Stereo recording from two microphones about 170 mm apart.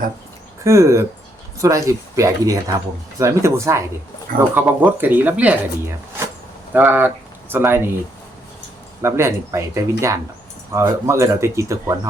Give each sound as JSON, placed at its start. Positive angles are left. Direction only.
{"t": 0.6, "sound": "speech", "side_deg": -15}
{"t": 9.0, "sound": "speech", "side_deg": -15}